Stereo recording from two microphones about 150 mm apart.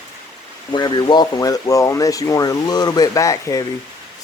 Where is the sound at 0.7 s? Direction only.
30° left (ahead or behind).